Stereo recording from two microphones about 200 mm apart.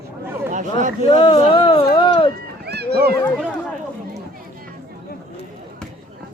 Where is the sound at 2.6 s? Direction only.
55° right (ahead or behind).